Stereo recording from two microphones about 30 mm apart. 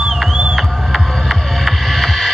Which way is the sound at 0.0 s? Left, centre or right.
Centre.